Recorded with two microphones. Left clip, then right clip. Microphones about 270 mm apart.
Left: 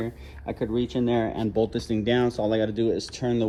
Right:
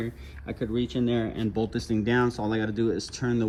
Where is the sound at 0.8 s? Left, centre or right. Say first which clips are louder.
Left 2 dB; centre.